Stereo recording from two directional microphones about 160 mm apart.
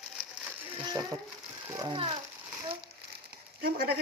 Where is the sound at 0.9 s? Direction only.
20° right (ahead or behind).